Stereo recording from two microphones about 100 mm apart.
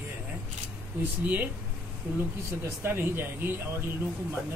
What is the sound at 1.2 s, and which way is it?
Speech, 20° right (ahead or behind).